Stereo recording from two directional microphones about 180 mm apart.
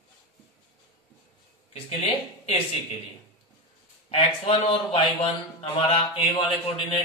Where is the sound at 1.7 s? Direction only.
35° left (ahead or behind).